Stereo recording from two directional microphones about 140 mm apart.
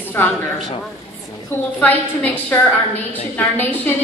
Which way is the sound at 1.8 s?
10° left (ahead or behind).